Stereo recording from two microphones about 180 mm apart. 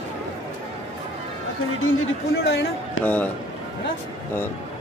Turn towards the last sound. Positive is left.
turn(degrees=10)  # may be behind; listen again after turning